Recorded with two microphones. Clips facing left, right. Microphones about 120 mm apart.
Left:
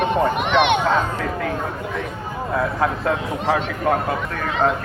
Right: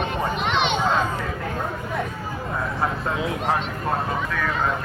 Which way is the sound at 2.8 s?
90° left.